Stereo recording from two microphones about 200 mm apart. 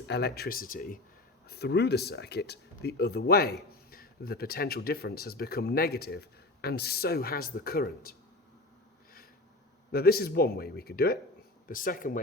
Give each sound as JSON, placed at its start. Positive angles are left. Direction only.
{"t": 0.1, "sound": "speech", "side_deg": 55}
{"t": 9.9, "sound": "speech", "side_deg": 50}